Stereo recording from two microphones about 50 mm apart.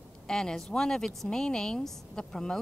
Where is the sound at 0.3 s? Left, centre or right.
Centre.